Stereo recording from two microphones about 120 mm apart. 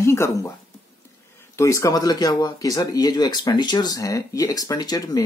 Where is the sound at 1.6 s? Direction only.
25° left (ahead or behind).